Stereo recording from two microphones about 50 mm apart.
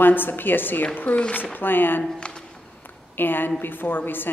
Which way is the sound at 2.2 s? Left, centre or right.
Left.